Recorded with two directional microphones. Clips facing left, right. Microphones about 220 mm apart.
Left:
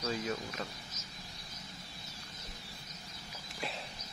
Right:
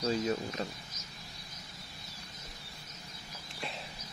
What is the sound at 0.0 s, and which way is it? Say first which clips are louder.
Speech: right 5 dB; 30° right (ahead or behind).